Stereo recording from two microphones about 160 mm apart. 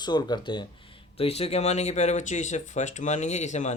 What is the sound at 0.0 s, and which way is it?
Speech, 25° left (ahead or behind).